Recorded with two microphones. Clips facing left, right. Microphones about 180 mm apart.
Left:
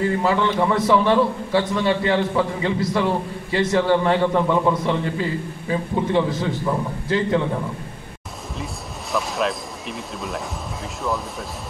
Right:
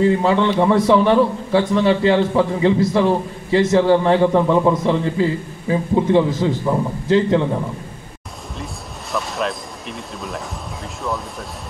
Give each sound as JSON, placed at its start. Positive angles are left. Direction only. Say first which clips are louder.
{"t": 0.0, "sound": "a man's voice", "louder": "right 4 dB", "side_deg": -25}
{"t": 4.4, "sound": "a man's voice", "louder": "right 4 dB", "side_deg": -10}
{"t": 4.8, "sound": "a man's voice", "louder": "right 5 dB", "side_deg": -30}
{"t": 9.1, "sound": "speech", "louder": "even", "side_deg": 0}